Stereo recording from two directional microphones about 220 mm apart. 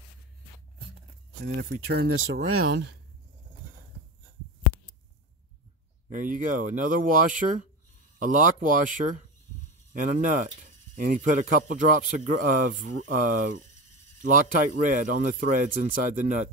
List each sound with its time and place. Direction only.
1.4 s speech: 45° right (ahead or behind)
2.0 s speech: 65° right (ahead or behind)
2.6 s speech: 50° right (ahead or behind)
6.0 s a man's voice: 35° right (ahead or behind)